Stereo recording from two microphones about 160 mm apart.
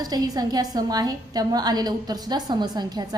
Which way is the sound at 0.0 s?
25° right (ahead or behind).